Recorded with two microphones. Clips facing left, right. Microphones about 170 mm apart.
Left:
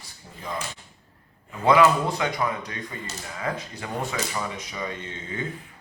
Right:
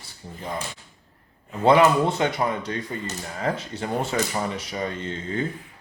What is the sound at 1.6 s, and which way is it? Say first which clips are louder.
Speech: right 2 dB; 30° right (ahead or behind).